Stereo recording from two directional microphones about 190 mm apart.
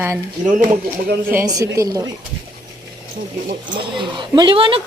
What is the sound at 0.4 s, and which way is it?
Speech, 45° right (ahead or behind).